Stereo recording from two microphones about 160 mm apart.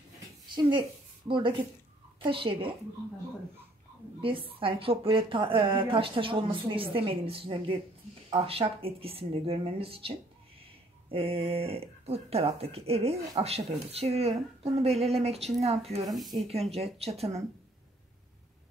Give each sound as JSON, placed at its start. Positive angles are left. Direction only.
{"t": 0.7, "sound": "a woman's voice", "side_deg": -30}
{"t": 4.2, "sound": "a woman's voice", "side_deg": -35}